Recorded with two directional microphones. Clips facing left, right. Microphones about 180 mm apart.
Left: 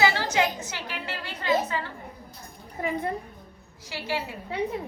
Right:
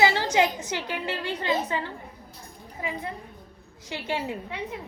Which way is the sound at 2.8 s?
50° left (ahead or behind).